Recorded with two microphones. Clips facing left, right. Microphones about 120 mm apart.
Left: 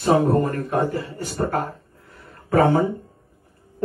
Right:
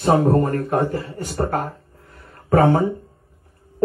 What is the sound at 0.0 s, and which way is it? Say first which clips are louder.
Speech: right 1 dB; 40° right (ahead or behind).